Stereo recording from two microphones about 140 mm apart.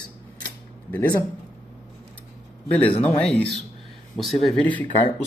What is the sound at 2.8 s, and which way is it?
Speech, 45° left (ahead or behind).